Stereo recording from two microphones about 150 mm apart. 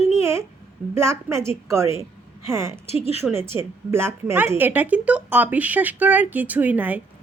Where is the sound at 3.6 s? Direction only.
15° right (ahead or behind).